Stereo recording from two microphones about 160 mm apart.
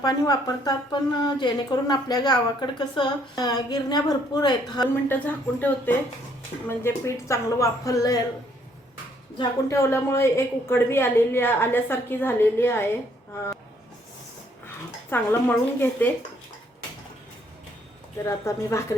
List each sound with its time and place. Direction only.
0.0 s a woman's voice: 25° left (ahead or behind)
5.0 s a woman's voice: 10° left (ahead or behind)
9.4 s a woman's voice: 20° left (ahead or behind)
15.1 s a woman's voice: 15° left (ahead or behind)
18.3 s a woman's voice: 20° left (ahead or behind)